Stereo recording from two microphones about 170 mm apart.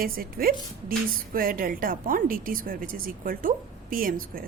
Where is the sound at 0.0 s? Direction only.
60° right (ahead or behind).